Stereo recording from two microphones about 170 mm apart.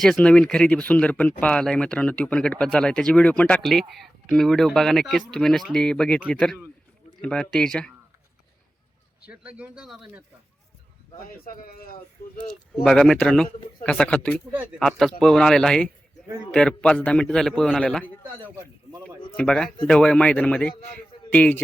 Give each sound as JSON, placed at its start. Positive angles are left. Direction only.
{"t": 0.0, "sound": "speech", "side_deg": 5}
{"t": 9.3, "sound": "speech", "side_deg": -5}
{"t": 11.4, "sound": "speech", "side_deg": 60}
{"t": 12.4, "sound": "speech", "side_deg": 0}
{"t": 18.6, "sound": "a sound", "side_deg": -20}
{"t": 19.4, "sound": "a man's voice", "side_deg": 5}